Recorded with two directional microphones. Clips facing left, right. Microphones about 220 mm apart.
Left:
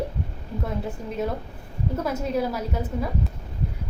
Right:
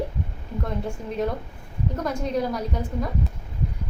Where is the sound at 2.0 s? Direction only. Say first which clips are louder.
Even; 5° left (ahead or behind).